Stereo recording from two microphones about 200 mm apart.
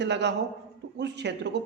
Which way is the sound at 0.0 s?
60° right (ahead or behind).